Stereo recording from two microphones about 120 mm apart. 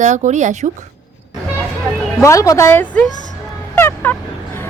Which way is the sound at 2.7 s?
15° left (ahead or behind).